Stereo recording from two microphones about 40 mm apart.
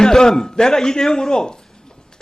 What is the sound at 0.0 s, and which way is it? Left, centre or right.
A man's voice, centre.